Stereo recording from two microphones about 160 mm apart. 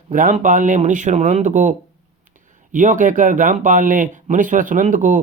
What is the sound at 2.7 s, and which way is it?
Speech, 55° right (ahead or behind).